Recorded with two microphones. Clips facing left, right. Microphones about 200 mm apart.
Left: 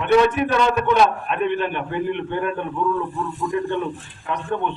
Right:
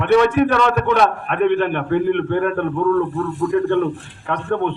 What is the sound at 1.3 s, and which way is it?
A man's voice, 65° right (ahead or behind).